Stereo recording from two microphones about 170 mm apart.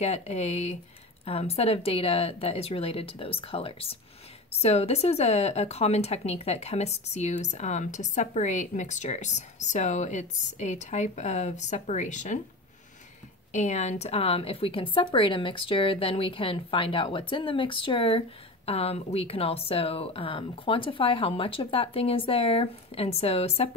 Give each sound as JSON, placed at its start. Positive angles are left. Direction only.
{"t": 0.0, "sound": "a woman's voice", "side_deg": 40}
{"t": 13.5, "sound": "speech", "side_deg": 45}